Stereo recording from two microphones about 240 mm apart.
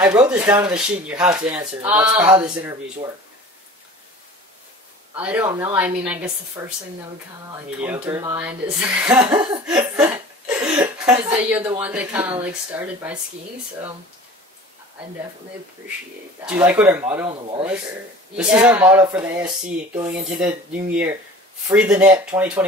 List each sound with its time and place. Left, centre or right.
0.0 s speech: centre
5.1 s speech: centre
7.8 s speech: centre
9.7 s cough: centre
10.7 s speech: centre
16.4 s speech: centre
17.3 s speech: right
18.3 s speech: centre